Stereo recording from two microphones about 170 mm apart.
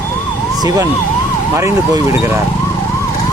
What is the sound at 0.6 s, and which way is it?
Speech, 20° right (ahead or behind).